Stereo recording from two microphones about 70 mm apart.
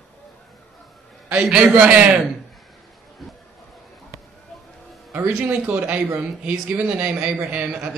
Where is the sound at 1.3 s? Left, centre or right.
Centre.